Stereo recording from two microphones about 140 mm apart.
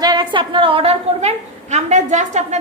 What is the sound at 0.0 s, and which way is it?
A woman's voice, 30° right (ahead or behind).